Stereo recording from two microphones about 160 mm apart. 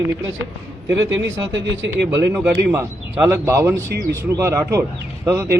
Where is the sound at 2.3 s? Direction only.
15° right (ahead or behind).